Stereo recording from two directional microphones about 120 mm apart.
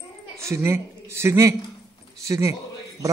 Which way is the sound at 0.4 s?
20° right (ahead or behind).